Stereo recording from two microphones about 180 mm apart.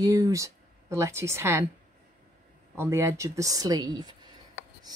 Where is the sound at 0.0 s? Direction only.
20° right (ahead or behind).